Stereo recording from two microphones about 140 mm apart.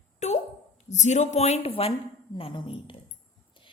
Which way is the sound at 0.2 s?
55° left (ahead or behind).